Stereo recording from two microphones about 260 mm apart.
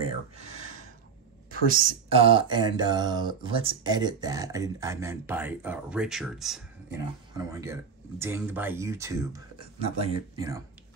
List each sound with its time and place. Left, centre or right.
1.7 s speech: right; by 10.6 s centre